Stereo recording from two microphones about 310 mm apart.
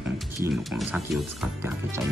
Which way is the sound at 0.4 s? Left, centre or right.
Centre.